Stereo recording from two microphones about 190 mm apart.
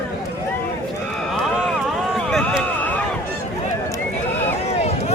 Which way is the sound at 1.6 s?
Centre (ahead or behind).